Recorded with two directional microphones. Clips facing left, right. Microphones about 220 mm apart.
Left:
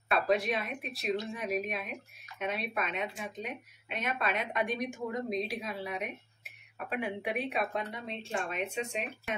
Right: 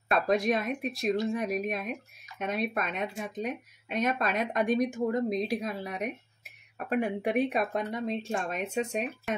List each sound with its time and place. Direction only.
0.3 s a woman's voice: 45° right (ahead or behind)